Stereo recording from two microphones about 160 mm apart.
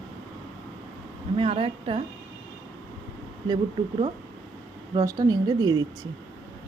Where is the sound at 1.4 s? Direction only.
35° right (ahead or behind).